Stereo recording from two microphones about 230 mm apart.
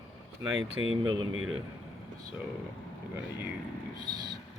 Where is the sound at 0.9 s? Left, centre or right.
Right.